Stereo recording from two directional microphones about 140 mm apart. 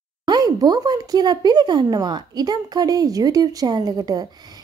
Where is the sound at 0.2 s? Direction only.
30° right (ahead or behind).